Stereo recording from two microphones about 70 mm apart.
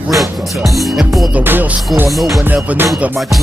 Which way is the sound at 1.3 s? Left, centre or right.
Right.